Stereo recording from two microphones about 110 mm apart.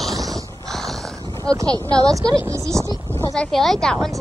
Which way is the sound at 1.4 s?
35° right (ahead or behind).